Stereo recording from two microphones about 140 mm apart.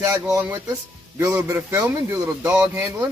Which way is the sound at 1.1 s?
15° right (ahead or behind).